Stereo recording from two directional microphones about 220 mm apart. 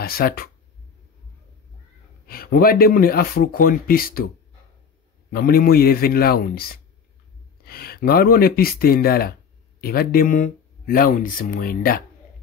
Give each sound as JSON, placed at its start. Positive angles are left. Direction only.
{"t": 0.0, "sound": "speech", "side_deg": 45}
{"t": 2.2, "sound": "speech", "side_deg": 45}
{"t": 5.3, "sound": "speech", "side_deg": 40}